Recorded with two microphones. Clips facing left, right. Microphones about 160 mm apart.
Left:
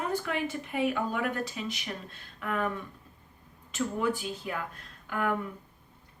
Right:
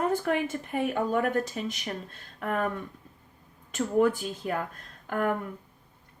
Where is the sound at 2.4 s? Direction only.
45° right (ahead or behind).